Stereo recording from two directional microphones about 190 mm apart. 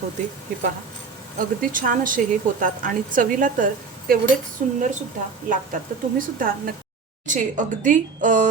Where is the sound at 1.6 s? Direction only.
45° right (ahead or behind).